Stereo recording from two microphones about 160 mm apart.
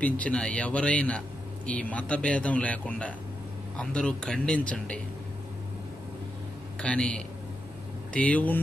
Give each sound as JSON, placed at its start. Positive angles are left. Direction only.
{"t": 0.0, "sound": "a man's voice", "side_deg": 10}
{"t": 6.8, "sound": "a man's voice", "side_deg": 5}